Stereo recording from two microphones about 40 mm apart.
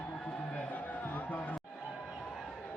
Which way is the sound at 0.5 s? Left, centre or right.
Left.